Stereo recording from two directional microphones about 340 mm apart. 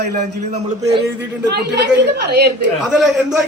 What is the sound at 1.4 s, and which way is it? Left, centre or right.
A woman's voice, right.